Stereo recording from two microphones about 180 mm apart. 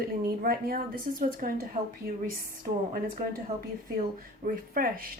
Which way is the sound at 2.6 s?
50° right (ahead or behind).